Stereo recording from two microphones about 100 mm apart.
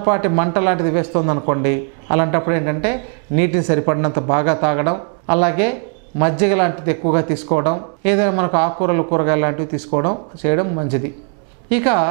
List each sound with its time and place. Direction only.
0.0 s speech: 15° right (ahead or behind)